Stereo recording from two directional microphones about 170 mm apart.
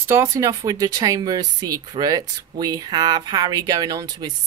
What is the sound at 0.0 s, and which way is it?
Speech, 15° right (ahead or behind).